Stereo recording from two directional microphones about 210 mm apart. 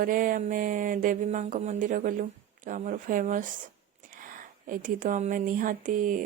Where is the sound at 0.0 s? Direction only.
40° right (ahead or behind).